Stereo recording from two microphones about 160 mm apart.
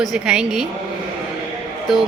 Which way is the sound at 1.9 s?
Centre (ahead or behind).